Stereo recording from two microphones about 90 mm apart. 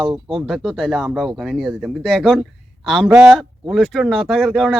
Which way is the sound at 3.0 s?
10° right (ahead or behind).